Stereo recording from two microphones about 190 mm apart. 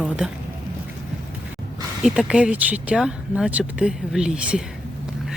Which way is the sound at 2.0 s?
5° right (ahead or behind).